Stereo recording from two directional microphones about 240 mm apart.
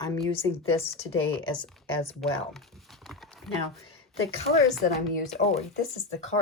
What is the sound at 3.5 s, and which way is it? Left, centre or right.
Speech, centre.